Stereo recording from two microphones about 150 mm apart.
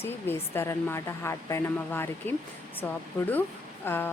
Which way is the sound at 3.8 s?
15° left (ahead or behind).